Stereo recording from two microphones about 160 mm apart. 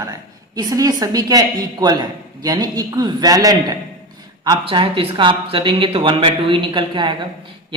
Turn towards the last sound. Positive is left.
turn(degrees=-30)  # may be behind; listen again after turning